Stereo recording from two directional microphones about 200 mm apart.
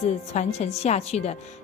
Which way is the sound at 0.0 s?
35° left (ahead or behind).